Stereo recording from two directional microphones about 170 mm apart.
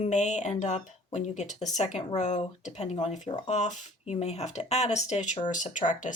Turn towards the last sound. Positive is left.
turn(degrees=45)  # may be behind; listen again after turning